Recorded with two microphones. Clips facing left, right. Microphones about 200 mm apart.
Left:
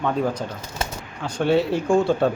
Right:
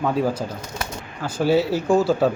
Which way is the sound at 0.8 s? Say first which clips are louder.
Left 3 dB; 25° left (ahead or behind).